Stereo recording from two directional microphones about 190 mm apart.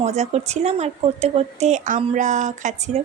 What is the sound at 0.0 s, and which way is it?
A woman's voice, 35° right (ahead or behind).